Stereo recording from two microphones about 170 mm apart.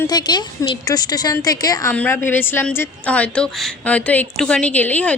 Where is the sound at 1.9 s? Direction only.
10° left (ahead or behind).